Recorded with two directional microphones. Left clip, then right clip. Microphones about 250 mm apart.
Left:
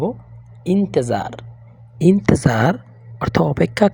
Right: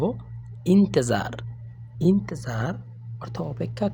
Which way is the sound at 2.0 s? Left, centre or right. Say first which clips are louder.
Left 9 dB; left.